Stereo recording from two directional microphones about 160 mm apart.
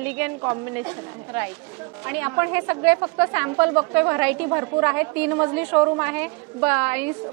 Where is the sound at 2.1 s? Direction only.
15° right (ahead or behind).